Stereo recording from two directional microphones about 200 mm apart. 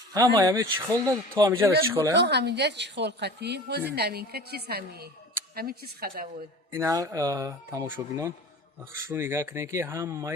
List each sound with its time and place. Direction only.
0.1 s speech: 20° right (ahead or behind)
2.1 s a woman's voice: 55° right (ahead or behind)
6.7 s speech: 15° right (ahead or behind)